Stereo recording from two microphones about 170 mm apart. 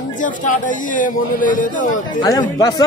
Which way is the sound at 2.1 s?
20° left (ahead or behind).